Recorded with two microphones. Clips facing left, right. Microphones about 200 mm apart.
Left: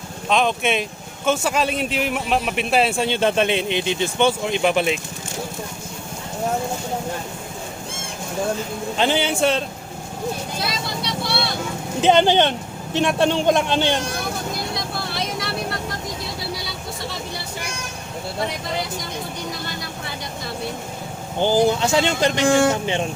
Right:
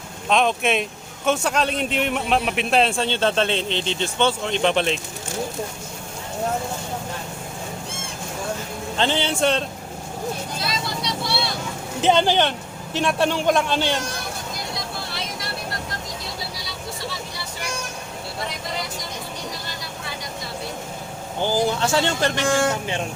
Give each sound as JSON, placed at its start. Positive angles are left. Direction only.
{"t": 0.3, "sound": "speech", "side_deg": 0}
{"t": 9.0, "sound": "speech", "side_deg": 10}
{"t": 12.0, "sound": "a man's voice", "side_deg": 20}
{"t": 21.4, "sound": "speech", "side_deg": 20}